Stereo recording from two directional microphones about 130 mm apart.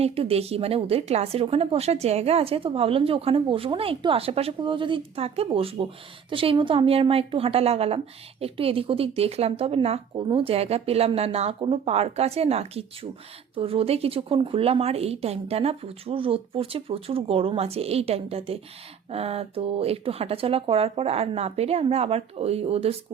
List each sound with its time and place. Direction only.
0.0 s a woman's voice: 50° right (ahead or behind)